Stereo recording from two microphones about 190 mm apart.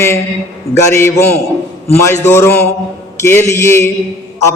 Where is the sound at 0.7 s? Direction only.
15° left (ahead or behind).